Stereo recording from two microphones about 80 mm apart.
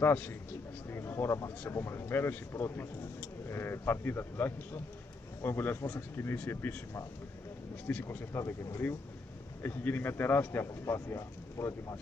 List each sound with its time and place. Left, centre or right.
0.0 s speech: left
0.8 s speech: left
7.9 s speech: left